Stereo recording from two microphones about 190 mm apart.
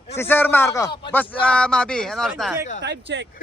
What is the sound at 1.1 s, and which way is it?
Speech, 10° left (ahead or behind).